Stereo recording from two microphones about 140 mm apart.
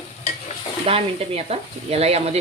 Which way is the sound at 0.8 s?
45° right (ahead or behind).